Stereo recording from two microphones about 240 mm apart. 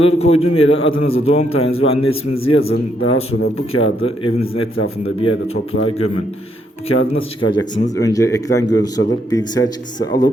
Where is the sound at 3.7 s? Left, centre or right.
Left.